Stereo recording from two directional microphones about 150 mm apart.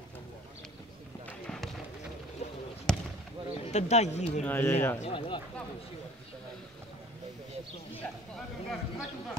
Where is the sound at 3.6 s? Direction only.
50° left (ahead or behind).